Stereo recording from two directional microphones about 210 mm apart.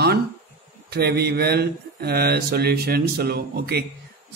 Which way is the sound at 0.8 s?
50° right (ahead or behind).